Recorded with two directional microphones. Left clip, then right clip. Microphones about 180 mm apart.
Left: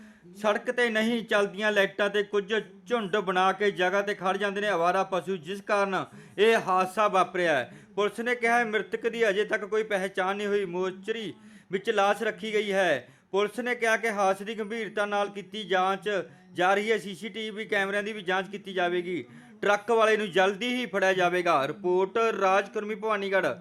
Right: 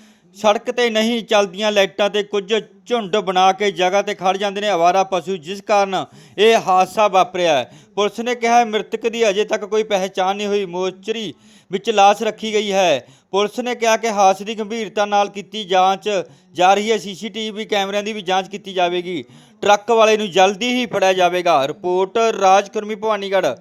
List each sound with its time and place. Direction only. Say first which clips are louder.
0.4 s speech: right 10 dB; 25° right (ahead or behind)